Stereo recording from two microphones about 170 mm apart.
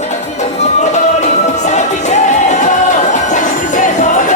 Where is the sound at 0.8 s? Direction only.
45° left (ahead or behind).